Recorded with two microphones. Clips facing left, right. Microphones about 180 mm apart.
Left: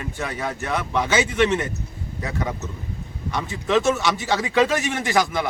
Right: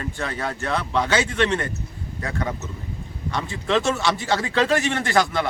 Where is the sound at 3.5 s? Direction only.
15° left (ahead or behind).